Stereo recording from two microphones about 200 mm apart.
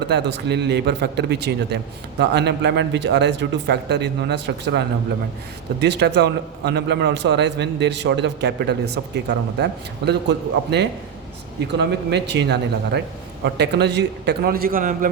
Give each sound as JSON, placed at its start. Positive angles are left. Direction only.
{"t": 0.1, "sound": "a man's voice", "side_deg": -55}